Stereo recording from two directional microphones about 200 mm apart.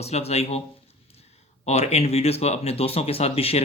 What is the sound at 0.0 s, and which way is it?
Speech, 30° left (ahead or behind).